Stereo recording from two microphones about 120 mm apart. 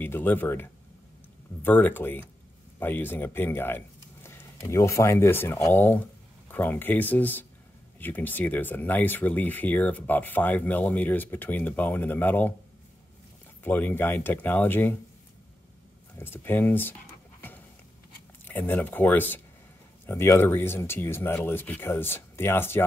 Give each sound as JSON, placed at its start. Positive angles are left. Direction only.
{"t": 0.0, "sound": "speech", "side_deg": 15}
{"t": 13.7, "sound": "speech", "side_deg": 15}
{"t": 16.2, "sound": "speech", "side_deg": 20}
{"t": 18.4, "sound": "speech", "side_deg": 15}